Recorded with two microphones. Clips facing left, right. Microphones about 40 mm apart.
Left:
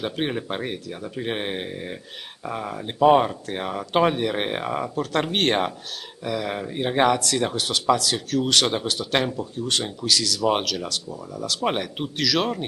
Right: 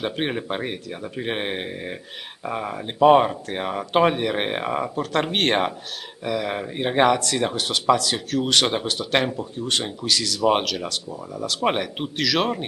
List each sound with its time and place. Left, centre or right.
0.0 s speech: centre